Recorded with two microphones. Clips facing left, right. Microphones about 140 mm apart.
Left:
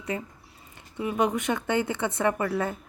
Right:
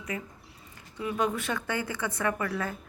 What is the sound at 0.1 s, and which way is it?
A woman's voice, 30° left (ahead or behind).